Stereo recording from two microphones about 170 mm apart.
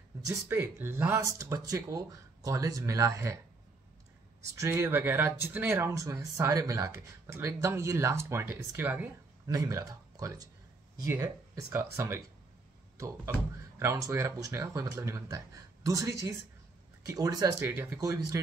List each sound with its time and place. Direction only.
0.5 s speech: 15° right (ahead or behind)
4.6 s speech: 20° right (ahead or behind)
12.9 s speech: 20° right (ahead or behind)